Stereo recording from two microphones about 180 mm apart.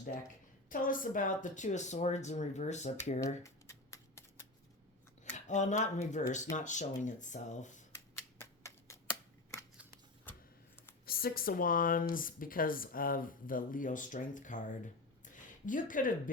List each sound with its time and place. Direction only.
0.7 s speech: 50° left (ahead or behind)
3.4 s shuffling cards: 15° left (ahead or behind)
5.5 s speech: 40° left (ahead or behind)
7.9 s scissors: 15° left (ahead or behind)
10.3 s a sound: 10° left (ahead or behind)
11.0 s speech: 55° left (ahead or behind)
15.2 s a sound: 45° left (ahead or behind)